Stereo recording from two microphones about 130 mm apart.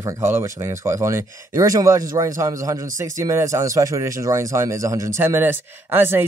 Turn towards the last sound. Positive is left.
turn(degrees=-15)  # may be behind; listen again after turning